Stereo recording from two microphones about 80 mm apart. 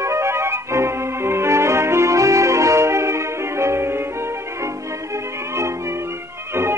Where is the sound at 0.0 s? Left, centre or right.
Right.